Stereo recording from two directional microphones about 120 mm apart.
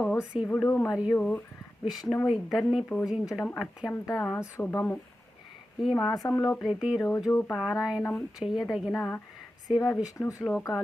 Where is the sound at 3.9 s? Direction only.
20° left (ahead or behind).